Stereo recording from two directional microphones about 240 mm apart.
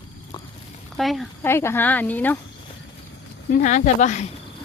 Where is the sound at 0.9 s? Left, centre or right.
Centre.